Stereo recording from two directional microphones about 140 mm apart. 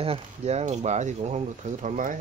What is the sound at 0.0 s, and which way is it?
Speech, 45° right (ahead or behind).